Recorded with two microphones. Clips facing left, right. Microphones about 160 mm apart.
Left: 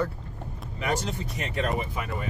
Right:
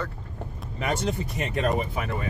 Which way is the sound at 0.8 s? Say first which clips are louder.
Right 2 dB; 55° right (ahead or behind).